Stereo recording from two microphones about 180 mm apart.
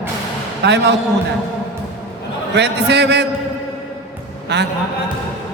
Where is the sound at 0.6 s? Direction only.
75° right (ahead or behind).